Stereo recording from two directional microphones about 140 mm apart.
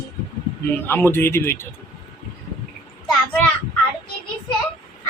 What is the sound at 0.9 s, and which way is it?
Speech, 15° left (ahead or behind).